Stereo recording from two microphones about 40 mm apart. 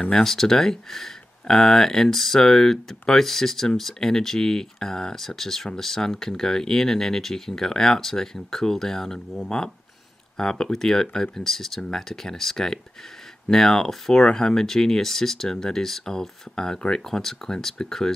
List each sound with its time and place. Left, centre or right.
0.2 s speech: centre